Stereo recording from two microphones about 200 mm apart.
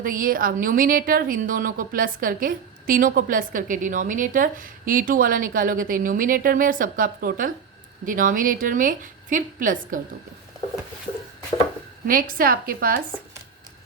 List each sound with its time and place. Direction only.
0.0 s a woman's voice: 45° right (ahead or behind)
12.0 s a woman's voice: 45° right (ahead or behind)